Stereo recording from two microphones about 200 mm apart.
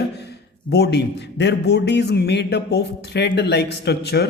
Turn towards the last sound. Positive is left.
turn(degrees=55)  # may be behind; listen again after turning